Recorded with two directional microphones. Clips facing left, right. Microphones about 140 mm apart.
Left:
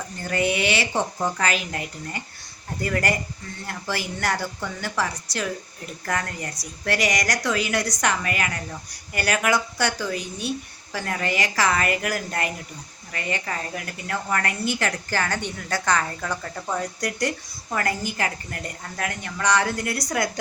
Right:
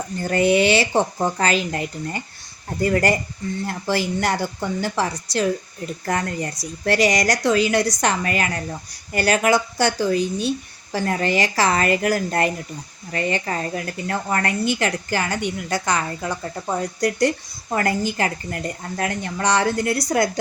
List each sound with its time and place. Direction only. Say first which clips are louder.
0.2 s a woman's voice: right 7 dB; 35° right (ahead or behind)